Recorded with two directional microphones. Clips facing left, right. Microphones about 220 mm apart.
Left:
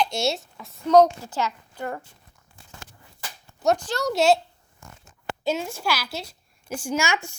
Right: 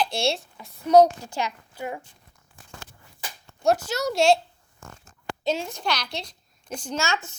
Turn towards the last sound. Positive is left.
turn(degrees=15)  # may be behind; listen again after turning